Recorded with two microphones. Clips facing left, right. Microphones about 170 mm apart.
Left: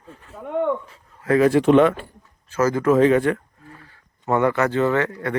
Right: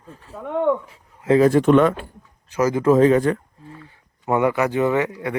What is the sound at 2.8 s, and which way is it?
Speech, 35° right (ahead or behind).